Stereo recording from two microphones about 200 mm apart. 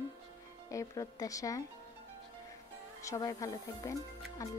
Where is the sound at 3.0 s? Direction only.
15° left (ahead or behind).